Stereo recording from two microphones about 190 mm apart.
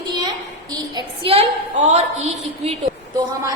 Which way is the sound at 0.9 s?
30° right (ahead or behind).